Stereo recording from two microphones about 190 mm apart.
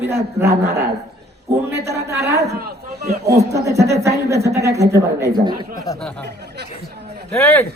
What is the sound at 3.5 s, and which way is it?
A woman's voice, 15° right (ahead or behind).